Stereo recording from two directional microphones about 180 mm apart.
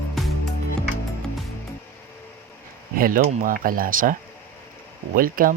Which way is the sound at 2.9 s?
50° right (ahead or behind).